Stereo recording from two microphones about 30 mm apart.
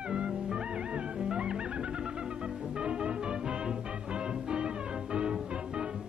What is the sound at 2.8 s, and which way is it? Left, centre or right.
Music, right.